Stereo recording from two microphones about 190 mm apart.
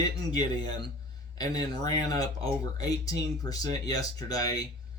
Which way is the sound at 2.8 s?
20° left (ahead or behind).